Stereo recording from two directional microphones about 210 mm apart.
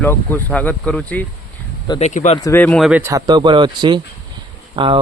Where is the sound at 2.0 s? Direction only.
35° left (ahead or behind).